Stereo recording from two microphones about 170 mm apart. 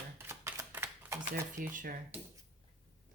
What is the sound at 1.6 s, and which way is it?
Speech, 55° right (ahead or behind).